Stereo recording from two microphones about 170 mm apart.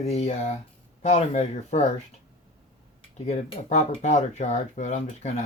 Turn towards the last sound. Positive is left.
turn(degrees=40)  # may be behind; listen again after turning